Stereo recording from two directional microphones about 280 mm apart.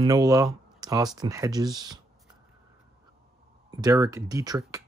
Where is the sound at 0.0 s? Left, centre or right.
Centre.